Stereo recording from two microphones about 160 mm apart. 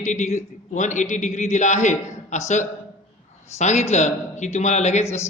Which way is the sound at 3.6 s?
45° left (ahead or behind).